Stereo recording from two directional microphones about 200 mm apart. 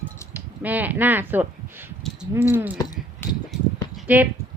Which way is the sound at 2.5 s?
10° right (ahead or behind).